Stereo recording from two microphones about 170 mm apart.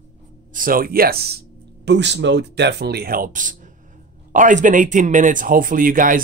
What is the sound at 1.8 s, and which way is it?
Speech, 90° right.